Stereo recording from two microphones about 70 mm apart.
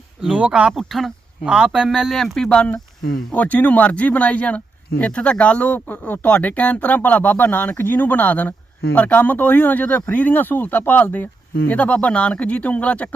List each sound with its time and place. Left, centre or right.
0.3 s speech: centre
0.7 s speech: centre
1.5 s speech: centre
3.3 s speech: left